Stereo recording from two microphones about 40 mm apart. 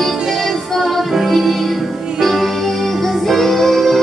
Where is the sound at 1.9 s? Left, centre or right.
Centre.